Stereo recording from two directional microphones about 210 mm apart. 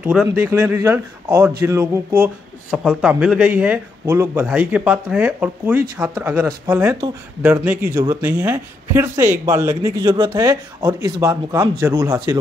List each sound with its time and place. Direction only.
0.0 s speech: 5° right (ahead or behind)
8.0 s speech: 10° right (ahead or behind)